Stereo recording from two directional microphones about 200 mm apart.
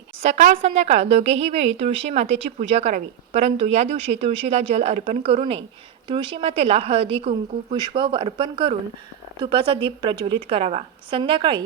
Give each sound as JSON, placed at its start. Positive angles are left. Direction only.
{"t": 0.2, "sound": "a woman's voice", "side_deg": -40}